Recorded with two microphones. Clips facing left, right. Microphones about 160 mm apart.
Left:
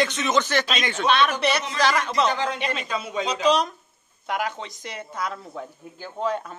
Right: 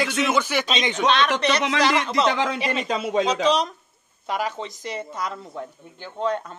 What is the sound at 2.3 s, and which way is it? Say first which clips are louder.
Speech: right 3 dB; 90° right.